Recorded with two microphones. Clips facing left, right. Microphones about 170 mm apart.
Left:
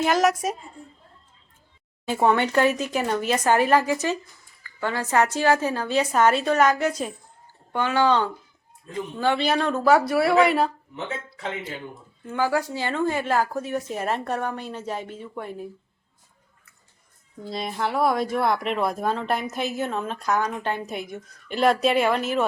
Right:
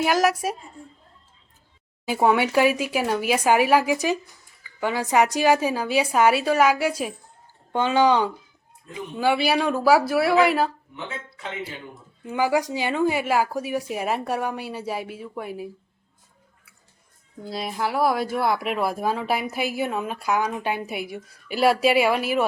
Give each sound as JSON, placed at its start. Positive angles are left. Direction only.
{"t": 0.0, "sound": "speech", "side_deg": -5}
{"t": 2.0, "sound": "a woman's voice", "side_deg": -10}
{"t": 7.7, "sound": "a woman's voice", "side_deg": -20}
{"t": 12.2, "sound": "a woman's voice", "side_deg": -15}
{"t": 17.4, "sound": "a woman's voice", "side_deg": -5}